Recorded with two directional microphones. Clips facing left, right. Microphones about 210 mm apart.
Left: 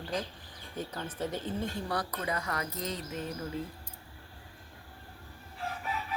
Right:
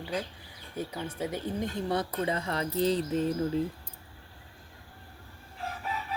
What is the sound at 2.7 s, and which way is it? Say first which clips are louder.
Music: right 10 dB; 30° right (ahead or behind).